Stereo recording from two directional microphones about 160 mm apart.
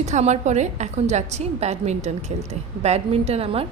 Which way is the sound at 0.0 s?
45° right (ahead or behind).